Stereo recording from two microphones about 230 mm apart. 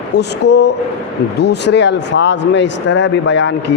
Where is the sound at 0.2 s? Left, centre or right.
Left.